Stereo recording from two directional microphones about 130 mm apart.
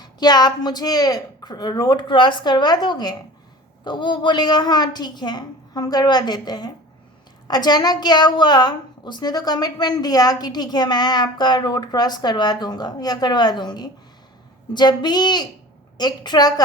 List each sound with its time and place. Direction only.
0.0 s a woman's voice: 30° left (ahead or behind)